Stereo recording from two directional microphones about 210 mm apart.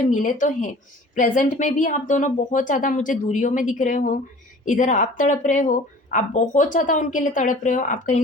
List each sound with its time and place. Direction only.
0.0 s a woman's voice: 40° left (ahead or behind)